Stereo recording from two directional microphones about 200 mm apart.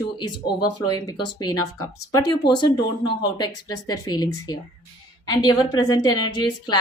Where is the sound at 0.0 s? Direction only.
20° left (ahead or behind).